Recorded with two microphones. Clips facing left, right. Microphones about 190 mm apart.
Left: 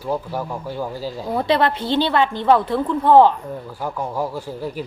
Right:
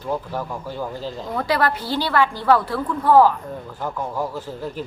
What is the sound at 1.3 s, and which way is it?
A woman's voice, 25° left (ahead or behind).